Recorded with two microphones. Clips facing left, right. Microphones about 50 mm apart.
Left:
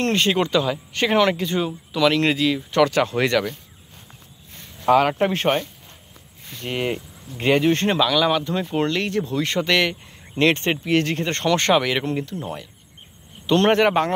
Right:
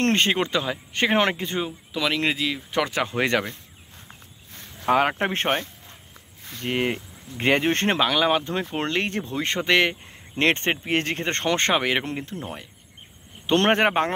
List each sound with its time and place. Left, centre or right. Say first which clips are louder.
0.0 s speech: even; right
0.3 s speech: left 4 dB; right
4.9 s speech: left 4 dB; centre
5.3 s speech: left 3 dB; right